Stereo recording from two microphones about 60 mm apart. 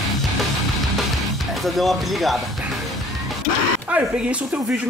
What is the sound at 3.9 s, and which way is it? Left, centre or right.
Speech, centre.